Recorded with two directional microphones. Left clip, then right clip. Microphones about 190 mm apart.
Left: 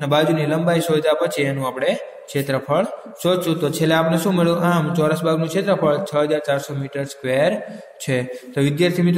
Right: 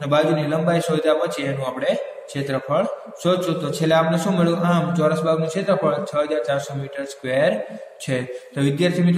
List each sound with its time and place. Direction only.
0.0 s a man's voice: 40° left (ahead or behind)